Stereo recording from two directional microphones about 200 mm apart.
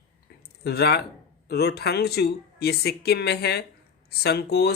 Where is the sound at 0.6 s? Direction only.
55° left (ahead or behind).